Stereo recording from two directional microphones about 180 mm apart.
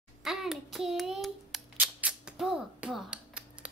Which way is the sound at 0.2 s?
Centre (ahead or behind).